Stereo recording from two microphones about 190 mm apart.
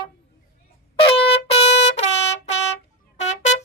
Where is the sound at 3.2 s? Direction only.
35° left (ahead or behind).